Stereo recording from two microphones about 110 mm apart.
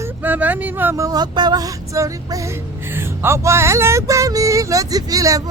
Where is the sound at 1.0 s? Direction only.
40° right (ahead or behind).